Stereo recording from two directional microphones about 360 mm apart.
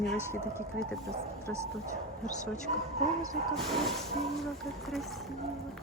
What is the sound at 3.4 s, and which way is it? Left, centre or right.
Speech, centre.